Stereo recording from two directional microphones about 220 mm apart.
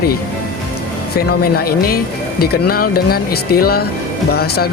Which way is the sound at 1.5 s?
45° left (ahead or behind).